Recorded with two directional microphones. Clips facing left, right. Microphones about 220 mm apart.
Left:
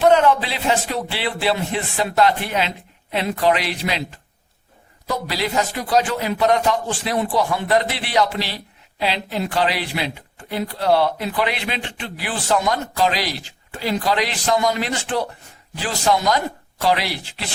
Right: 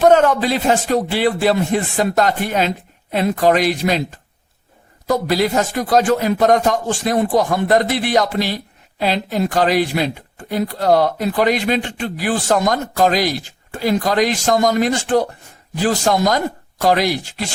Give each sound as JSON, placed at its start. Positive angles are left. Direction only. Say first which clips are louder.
{"t": 0.0, "sound": "a man's voice", "louder": "right 3 dB", "side_deg": -45}
{"t": 5.0, "sound": "a man's voice", "louder": "right 7 dB", "side_deg": -45}